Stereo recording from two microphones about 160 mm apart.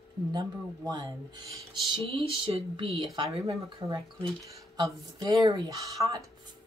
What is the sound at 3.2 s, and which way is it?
Speech, 20° right (ahead or behind).